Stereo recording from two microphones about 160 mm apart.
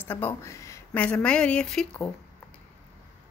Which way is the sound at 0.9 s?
10° left (ahead or behind).